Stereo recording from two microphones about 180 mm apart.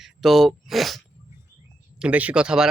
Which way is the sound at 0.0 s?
Centre (ahead or behind).